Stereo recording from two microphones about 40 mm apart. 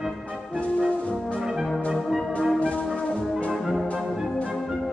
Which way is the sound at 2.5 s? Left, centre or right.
Left.